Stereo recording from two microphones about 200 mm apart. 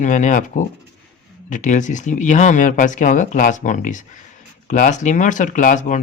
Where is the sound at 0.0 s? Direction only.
40° left (ahead or behind).